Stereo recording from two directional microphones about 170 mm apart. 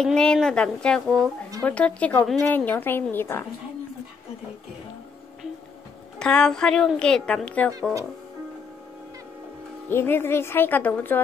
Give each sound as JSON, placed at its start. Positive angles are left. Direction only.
{"t": 0.0, "sound": "a woman's voice", "side_deg": 5}
{"t": 6.1, "sound": "a woman's voice", "side_deg": 5}
{"t": 9.8, "sound": "a woman's voice", "side_deg": 15}